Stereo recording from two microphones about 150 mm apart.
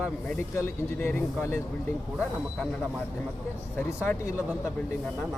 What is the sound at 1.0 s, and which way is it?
Speech, 15° left (ahead or behind).